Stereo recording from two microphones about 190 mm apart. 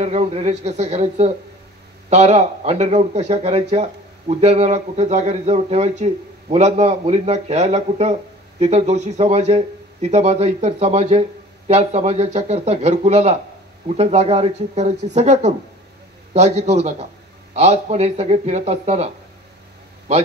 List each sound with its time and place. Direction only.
0.0 s speech: 35° right (ahead or behind)